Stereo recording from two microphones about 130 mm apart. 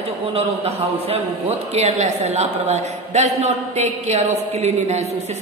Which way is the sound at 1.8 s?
60° right (ahead or behind).